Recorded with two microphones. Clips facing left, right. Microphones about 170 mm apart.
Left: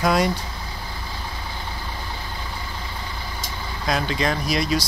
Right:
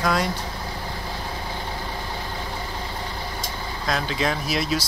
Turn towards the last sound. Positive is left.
turn(degrees=-5)  # may be behind; listen again after turning